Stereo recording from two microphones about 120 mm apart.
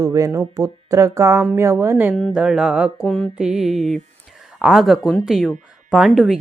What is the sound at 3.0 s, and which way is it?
Speech, 5° left (ahead or behind).